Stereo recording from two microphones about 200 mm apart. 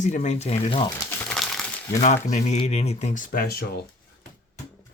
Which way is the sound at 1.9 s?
35° left (ahead or behind).